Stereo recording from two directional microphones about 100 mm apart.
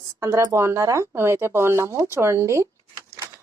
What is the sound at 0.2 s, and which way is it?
Speech, 30° right (ahead or behind).